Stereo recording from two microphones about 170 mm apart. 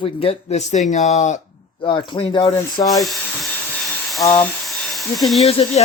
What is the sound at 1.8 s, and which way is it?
Speech, 25° left (ahead or behind).